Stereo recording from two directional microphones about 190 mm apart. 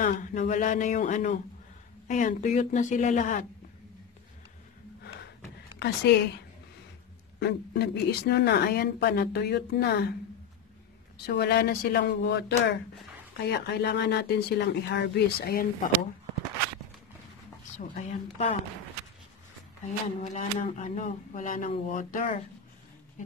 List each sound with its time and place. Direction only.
0.0 s a woman's voice: 45° left (ahead or behind)
5.8 s a woman's voice: 60° left (ahead or behind)
11.2 s a woman's voice: 55° left (ahead or behind)
17.7 s a woman's voice: 40° left (ahead or behind)
20.2 s speech: 40° left (ahead or behind)